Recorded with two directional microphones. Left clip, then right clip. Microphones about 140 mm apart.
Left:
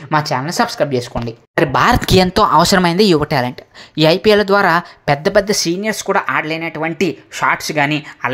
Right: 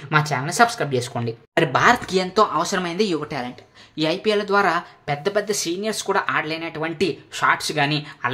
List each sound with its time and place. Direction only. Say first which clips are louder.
0.1 s speech: left 4 dB; 35° left (ahead or behind)
1.7 s speech: left 4 dB; 65° left (ahead or behind); by 8.3 s 35° left (ahead or behind)